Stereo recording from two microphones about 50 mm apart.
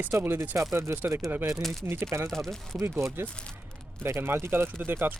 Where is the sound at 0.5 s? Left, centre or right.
Right.